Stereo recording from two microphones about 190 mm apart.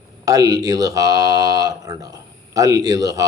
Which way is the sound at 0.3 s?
20° right (ahead or behind).